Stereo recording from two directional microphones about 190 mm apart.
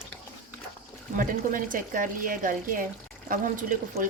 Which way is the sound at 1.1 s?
45° right (ahead or behind).